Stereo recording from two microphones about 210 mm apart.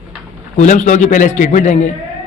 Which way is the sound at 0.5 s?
35° left (ahead or behind).